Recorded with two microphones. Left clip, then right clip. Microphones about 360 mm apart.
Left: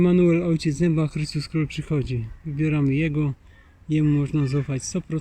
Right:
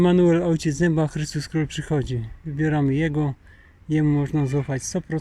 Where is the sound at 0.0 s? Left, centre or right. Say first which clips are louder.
Right 2 dB; centre.